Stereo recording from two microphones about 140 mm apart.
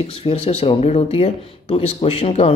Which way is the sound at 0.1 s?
45° left (ahead or behind).